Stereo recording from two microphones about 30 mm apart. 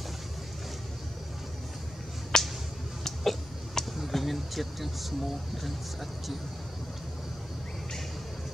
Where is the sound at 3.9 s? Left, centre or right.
Centre.